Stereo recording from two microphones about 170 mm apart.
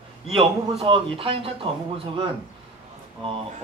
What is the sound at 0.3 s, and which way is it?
Speech, 35° right (ahead or behind).